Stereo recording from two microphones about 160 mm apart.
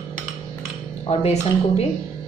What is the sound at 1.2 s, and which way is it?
Speech, 40° left (ahead or behind).